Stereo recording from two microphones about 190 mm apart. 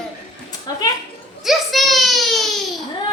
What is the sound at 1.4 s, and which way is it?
Child singing, centre (ahead or behind).